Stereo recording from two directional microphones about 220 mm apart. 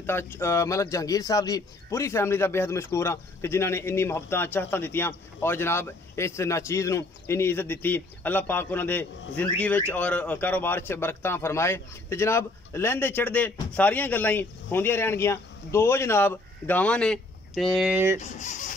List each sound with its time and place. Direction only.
0.0 s a man's voice: 10° left (ahead or behind)
18.2 s speech: 30° left (ahead or behind)